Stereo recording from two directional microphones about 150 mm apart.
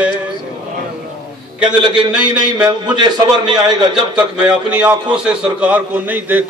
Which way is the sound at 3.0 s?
30° right (ahead or behind).